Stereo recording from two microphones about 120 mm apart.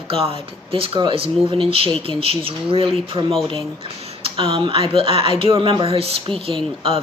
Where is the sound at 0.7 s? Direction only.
45° right (ahead or behind).